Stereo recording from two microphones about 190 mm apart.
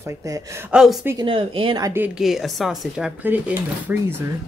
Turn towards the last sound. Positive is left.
turn(degrees=-10)  # may be behind; listen again after turning